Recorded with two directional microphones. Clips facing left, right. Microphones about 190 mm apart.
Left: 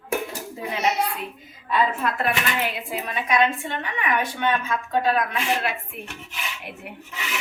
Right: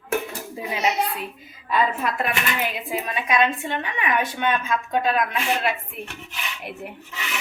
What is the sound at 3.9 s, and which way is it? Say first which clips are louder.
A woman's voice: even; 15° right (ahead or behind).